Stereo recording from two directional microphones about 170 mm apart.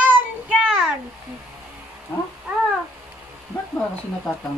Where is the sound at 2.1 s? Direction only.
10° left (ahead or behind).